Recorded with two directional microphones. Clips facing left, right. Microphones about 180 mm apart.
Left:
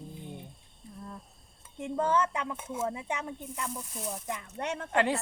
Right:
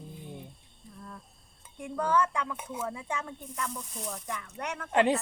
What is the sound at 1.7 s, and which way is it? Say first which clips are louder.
Speech: even; 20° left (ahead or behind).